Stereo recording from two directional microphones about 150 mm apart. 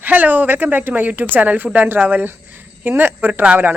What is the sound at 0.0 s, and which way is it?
A woman's voice, 10° right (ahead or behind).